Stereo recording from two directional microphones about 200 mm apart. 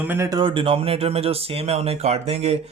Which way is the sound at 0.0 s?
10° right (ahead or behind).